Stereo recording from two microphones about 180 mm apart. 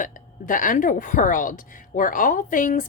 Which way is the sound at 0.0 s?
45° left (ahead or behind).